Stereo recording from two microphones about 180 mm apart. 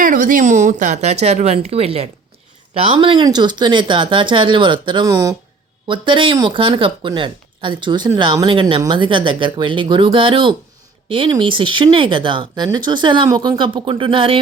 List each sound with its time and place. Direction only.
0.0 s a woman's voice: 45° right (ahead or behind); by 14.4 s 30° right (ahead or behind)